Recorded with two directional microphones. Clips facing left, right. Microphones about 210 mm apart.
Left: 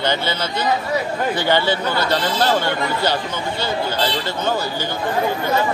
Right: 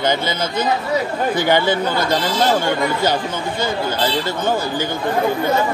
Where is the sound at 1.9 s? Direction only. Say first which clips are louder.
Right 1 dB; 15° right (ahead or behind).